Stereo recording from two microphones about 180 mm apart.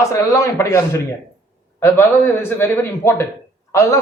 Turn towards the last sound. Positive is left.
turn(degrees=15)  # may be behind; listen again after turning